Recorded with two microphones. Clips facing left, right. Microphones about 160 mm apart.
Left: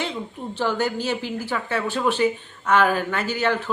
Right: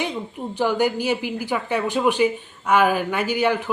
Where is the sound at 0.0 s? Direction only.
15° right (ahead or behind).